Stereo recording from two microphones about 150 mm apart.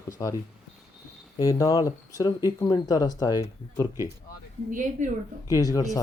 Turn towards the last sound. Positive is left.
turn(degrees=25)  # may be behind; listen again after turning